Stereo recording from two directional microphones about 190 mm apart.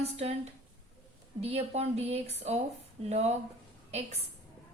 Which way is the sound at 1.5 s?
35° right (ahead or behind).